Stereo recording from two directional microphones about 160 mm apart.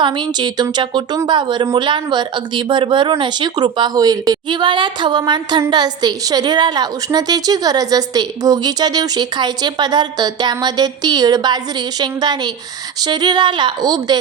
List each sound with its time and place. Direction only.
0.0 s a woman's voice: 30° right (ahead or behind)